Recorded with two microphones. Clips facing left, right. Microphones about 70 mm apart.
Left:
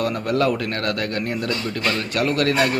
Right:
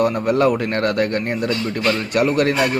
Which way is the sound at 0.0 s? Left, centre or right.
Right.